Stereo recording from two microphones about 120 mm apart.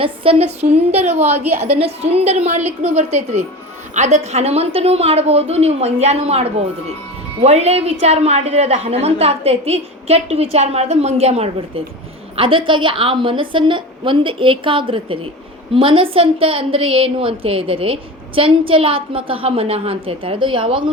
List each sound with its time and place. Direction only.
0.0 s a woman's voice: 50° right (ahead or behind); by 1.6 s 65° right (ahead or behind)
1.8 s a woman's voice: 55° right (ahead or behind)
12.4 s a woman's voice: 45° right (ahead or behind)